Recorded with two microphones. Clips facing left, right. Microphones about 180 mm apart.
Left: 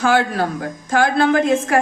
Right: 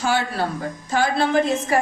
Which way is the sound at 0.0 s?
55° left (ahead or behind).